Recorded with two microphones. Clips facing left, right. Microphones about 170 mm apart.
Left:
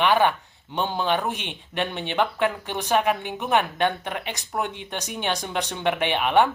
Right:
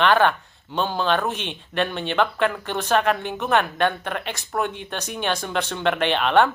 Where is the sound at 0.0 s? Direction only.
10° left (ahead or behind).